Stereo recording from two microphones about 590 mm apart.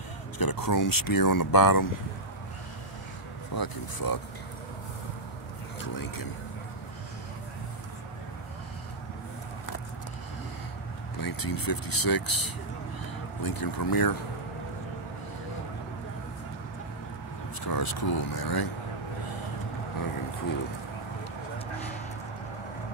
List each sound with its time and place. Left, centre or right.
0.4 s speech: left
3.5 s speech: left
5.8 s speech: left
11.1 s speech: left
17.6 s speech: left